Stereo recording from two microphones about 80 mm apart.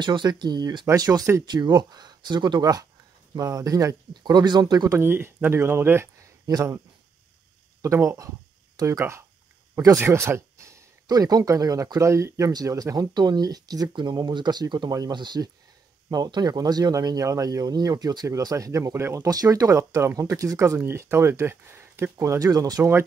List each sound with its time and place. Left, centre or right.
0.0 s speech: right
1.5 s speech: right
2.6 s speech: right
4.1 s speech: right
4.9 s speech: right
6.4 s speech: right
7.8 s speech: right
11.1 s speech: right
19.2 s speech: right
22.1 s speech: right